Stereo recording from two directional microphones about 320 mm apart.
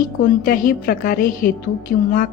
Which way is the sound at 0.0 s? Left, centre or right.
Left.